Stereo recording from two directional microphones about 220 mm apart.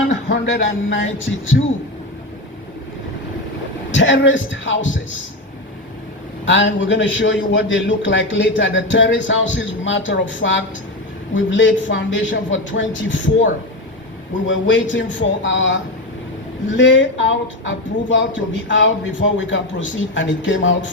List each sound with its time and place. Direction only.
0.1 s speech: 60° left (ahead or behind)
3.9 s speech: 55° left (ahead or behind)
6.4 s speech: 55° left (ahead or behind)
14.4 s speech: 60° left (ahead or behind)